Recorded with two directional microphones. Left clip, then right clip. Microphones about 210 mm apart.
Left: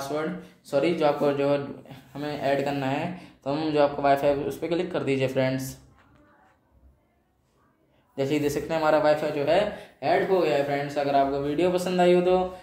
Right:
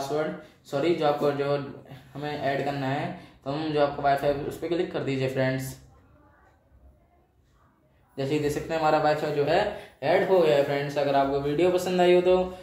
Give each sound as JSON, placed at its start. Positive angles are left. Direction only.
{"t": 0.7, "sound": "speech", "side_deg": 35}
{"t": 8.1, "sound": "speech", "side_deg": 25}
{"t": 9.9, "sound": "speech", "side_deg": 0}